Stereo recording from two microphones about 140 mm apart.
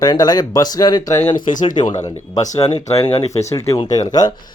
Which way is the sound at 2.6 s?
50° left (ahead or behind).